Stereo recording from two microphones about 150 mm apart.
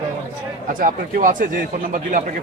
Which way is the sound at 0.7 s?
65° right (ahead or behind).